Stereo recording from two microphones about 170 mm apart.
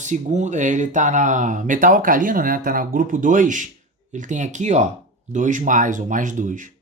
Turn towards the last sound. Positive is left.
turn(degrees=-50)  # may be behind; listen again after turning